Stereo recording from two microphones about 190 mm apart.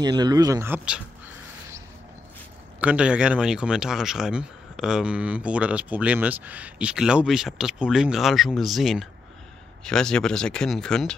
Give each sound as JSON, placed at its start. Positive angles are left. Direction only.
{"t": 0.0, "sound": "speech", "side_deg": -20}
{"t": 2.8, "sound": "speech", "side_deg": -5}